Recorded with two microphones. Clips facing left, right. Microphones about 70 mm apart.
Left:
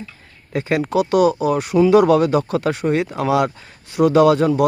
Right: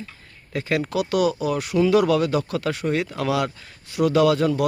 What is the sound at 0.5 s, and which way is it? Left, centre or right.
Speech, left.